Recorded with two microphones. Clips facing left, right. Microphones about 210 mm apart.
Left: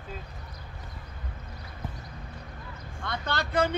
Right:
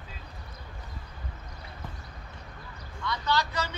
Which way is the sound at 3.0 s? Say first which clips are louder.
Right 3 dB; 55° left (ahead or behind).